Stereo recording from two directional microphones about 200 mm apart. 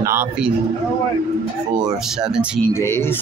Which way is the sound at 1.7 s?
20° right (ahead or behind).